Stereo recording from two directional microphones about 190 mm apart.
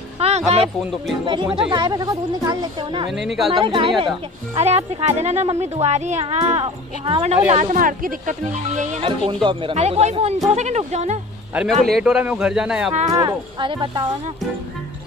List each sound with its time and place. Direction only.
0.2 s a sound: 35° right (ahead or behind)
1.2 s a woman's voice: 25° right (ahead or behind)
3.1 s a man's voice: centre (ahead or behind)
3.5 s a woman's voice: 25° right (ahead or behind)
11.5 s a man's voice: centre (ahead or behind)
12.9 s speech: 35° right (ahead or behind)
13.2 s a woman's voice: 20° right (ahead or behind)